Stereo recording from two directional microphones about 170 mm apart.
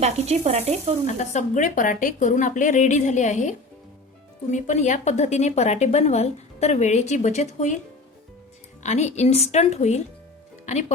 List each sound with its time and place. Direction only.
0.0 s sizzle: 40° right (ahead or behind)
1.0 s speech: 45° left (ahead or behind)
4.5 s speech: 45° left (ahead or behind)
8.8 s a woman's voice: 45° left (ahead or behind)